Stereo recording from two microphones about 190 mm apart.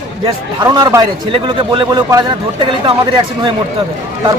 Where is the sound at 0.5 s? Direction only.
20° right (ahead or behind).